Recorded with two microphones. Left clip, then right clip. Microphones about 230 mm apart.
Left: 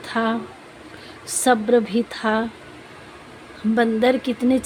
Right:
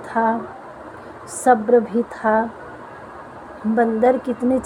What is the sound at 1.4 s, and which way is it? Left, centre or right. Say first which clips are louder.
Speech: right 3 dB; left.